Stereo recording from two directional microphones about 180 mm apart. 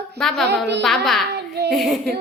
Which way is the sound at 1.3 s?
65° right (ahead or behind).